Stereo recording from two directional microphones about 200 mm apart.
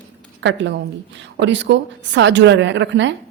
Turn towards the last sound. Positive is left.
turn(degrees=-65)  # may be behind; listen again after turning